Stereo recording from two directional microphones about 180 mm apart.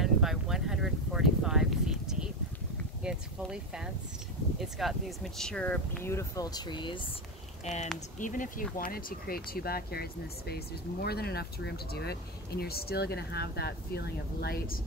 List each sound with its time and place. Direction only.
0.0 s a sound: centre (ahead or behind)
4.6 s speech: centre (ahead or behind); by 7.1 s 25° left (ahead or behind)
7.6 s speech: 40° left (ahead or behind); by 14.8 s 60° left (ahead or behind)